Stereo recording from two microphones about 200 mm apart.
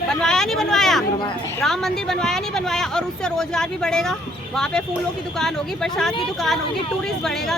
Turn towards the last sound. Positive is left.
turn(degrees=0)  # may be behind; listen again after turning